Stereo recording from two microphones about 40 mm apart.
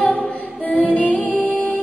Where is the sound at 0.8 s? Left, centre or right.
Left.